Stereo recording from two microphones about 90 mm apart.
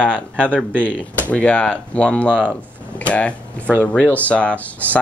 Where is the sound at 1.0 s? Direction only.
15° left (ahead or behind).